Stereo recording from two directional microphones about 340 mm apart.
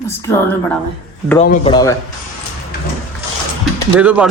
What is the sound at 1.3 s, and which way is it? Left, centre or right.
Speech, centre.